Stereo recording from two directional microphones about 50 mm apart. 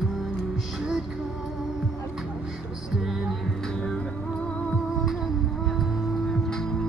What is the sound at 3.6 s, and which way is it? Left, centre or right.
Music, centre.